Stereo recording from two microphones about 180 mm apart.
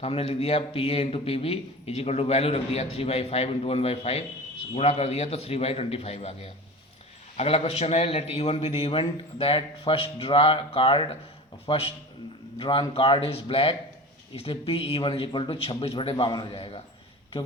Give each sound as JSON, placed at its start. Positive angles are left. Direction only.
{"t": 0.0, "sound": "a man's voice", "side_deg": 35}